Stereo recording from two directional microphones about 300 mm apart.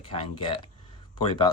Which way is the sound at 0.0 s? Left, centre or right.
Centre.